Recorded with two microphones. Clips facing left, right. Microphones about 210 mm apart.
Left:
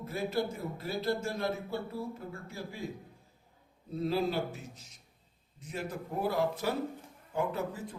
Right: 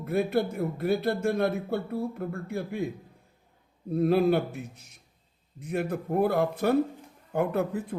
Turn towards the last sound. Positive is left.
turn(degrees=-60)  # may be behind; listen again after turning